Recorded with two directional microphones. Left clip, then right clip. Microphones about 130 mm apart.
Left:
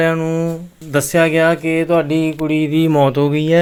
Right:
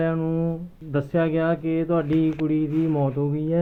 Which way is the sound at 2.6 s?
50° left (ahead or behind).